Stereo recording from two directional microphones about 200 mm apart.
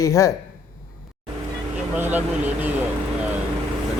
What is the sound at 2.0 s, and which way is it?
Speech, 10° right (ahead or behind).